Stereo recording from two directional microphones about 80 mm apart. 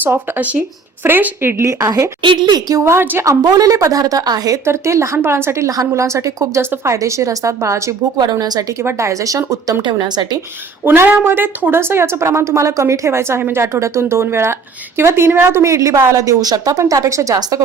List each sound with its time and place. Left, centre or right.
0.0 s a woman's voice: right
2.2 s a woman's voice: right
2.8 s a woman's voice: right
3.2 s speech: right
4.6 s a woman's voice: right
8.2 s a woman's voice: right
8.8 s a woman's voice: right
9.8 s a woman's voice: right
10.8 s a woman's voice: right